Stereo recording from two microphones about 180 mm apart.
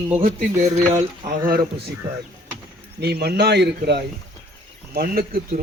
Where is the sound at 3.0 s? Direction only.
65° right (ahead or behind).